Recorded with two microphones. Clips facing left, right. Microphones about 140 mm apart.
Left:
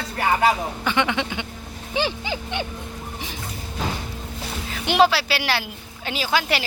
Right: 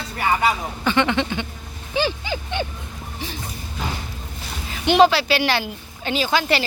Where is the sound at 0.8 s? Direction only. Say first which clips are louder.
Right 3 dB; 10° left (ahead or behind).